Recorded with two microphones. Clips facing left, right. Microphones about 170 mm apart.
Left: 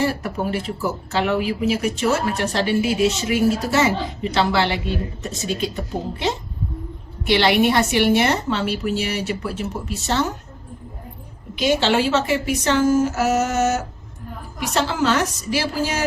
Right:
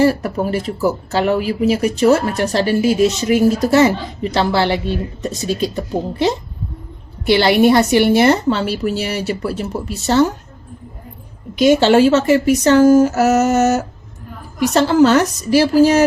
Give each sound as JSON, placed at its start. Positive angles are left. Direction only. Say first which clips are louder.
{"t": 0.0, "sound": "speech", "louder": "right 7 dB", "side_deg": -40}
{"t": 11.5, "sound": "speech", "louder": "right 8 dB", "side_deg": -45}